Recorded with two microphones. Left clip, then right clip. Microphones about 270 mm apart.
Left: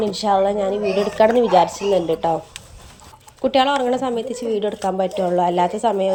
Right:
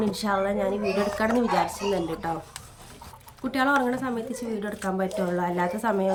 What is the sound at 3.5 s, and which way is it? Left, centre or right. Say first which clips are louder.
A woman's voice: left 6 dB; centre.